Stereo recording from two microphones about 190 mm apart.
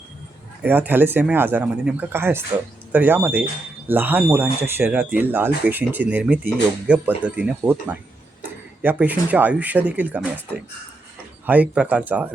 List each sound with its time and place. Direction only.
0.6 s speech: 10° right (ahead or behind)
8.8 s speech: 10° right (ahead or behind)